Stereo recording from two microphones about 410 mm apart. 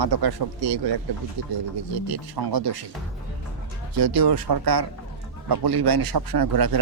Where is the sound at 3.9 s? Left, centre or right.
Right.